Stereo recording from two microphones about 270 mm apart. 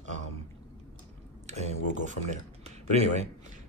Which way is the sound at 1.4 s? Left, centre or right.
Right.